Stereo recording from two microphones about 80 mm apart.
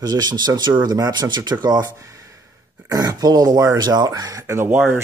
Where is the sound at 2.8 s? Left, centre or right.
Right.